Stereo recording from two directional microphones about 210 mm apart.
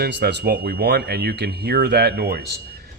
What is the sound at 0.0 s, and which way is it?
A man's voice, 55° right (ahead or behind).